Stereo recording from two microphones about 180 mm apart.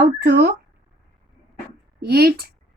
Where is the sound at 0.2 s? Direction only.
70° right (ahead or behind).